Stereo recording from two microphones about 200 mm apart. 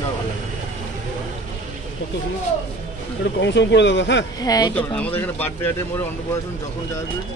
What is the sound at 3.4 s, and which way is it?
Speech, 60° left (ahead or behind).